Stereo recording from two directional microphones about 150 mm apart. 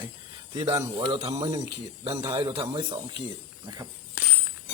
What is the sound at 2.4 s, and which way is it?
Speech, 35° right (ahead or behind).